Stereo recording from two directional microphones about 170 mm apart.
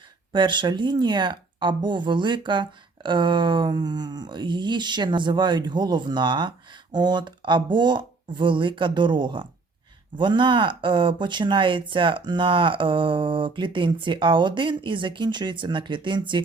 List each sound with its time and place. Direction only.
0.3 s speech: 30° right (ahead or behind)